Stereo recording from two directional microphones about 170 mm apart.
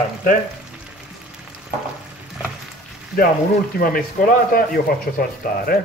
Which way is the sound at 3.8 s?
55° left (ahead or behind).